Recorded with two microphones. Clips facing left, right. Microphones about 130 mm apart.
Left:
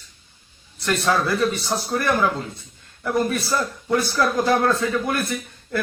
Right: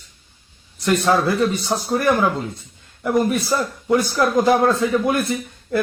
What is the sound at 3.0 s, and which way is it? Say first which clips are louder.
Speech: right 3 dB; 20° right (ahead or behind).